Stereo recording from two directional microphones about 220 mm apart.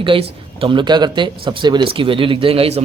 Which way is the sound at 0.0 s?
25° right (ahead or behind).